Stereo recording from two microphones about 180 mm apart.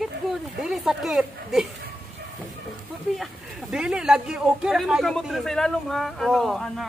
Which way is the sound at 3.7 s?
5° right (ahead or behind).